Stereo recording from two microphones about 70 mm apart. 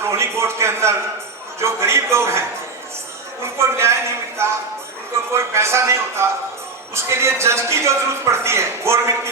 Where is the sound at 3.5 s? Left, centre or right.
Right.